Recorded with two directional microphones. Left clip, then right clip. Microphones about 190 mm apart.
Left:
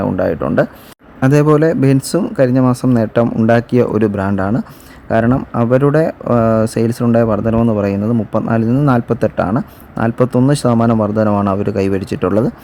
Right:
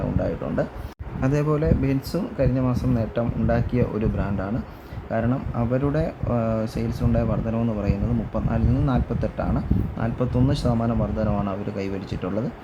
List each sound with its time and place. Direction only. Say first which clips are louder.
0.2 s speech: left 12 dB; 65° left (ahead or behind)
1.2 s speech: left 12 dB; 50° left (ahead or behind)